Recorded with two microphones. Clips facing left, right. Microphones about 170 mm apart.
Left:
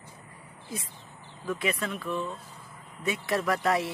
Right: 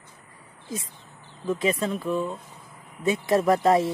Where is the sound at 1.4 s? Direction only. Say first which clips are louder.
Right 6 dB; 25° right (ahead or behind).